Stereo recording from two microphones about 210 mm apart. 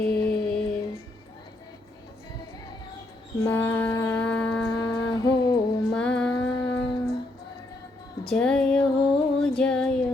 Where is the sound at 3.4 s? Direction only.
10° left (ahead or behind).